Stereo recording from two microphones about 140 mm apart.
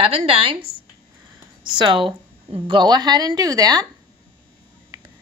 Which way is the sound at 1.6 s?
35° right (ahead or behind).